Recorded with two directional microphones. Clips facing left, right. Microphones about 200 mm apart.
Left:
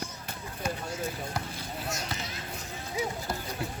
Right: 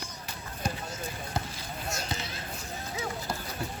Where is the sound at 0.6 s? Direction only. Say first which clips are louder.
Left 1 dB; 35° right (ahead or behind).